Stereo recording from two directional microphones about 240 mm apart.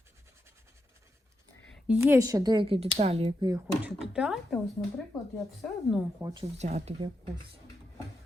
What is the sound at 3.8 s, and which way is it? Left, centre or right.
Speech, centre.